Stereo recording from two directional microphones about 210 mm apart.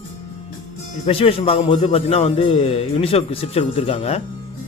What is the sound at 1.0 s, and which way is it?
A man's voice, 25° left (ahead or behind).